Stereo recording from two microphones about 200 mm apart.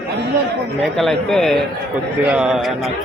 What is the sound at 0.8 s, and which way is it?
Speech, centre (ahead or behind).